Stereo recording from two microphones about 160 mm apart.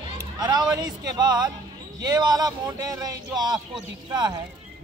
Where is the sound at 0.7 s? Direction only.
25° right (ahead or behind).